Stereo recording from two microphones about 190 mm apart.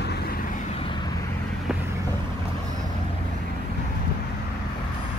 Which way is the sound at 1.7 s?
Centre (ahead or behind).